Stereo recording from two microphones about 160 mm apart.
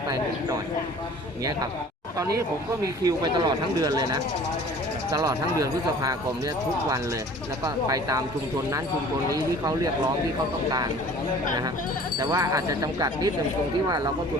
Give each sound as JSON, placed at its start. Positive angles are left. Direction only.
{"t": 3.0, "sound": "speech", "side_deg": -25}
{"t": 7.6, "sound": "speech", "side_deg": -25}
{"t": 9.3, "sound": "speech", "side_deg": -25}
{"t": 12.2, "sound": "speech", "side_deg": -25}